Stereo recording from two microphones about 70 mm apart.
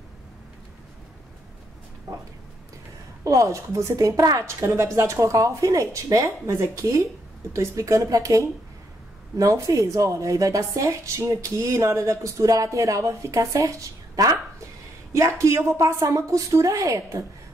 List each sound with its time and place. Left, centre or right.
3.3 s a woman's voice: right